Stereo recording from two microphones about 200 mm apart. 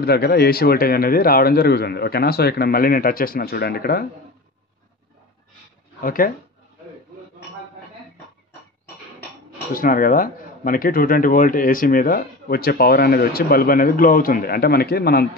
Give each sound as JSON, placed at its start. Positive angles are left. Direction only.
{"t": 0.0, "sound": "speech", "side_deg": 50}
{"t": 6.0, "sound": "speech", "side_deg": 45}
{"t": 9.8, "sound": "speech", "side_deg": 45}